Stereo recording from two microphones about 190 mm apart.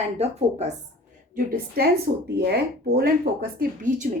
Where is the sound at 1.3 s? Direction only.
55° right (ahead or behind).